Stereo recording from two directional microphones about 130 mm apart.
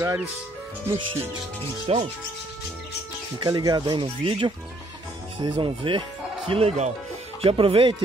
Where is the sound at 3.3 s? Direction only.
35° right (ahead or behind).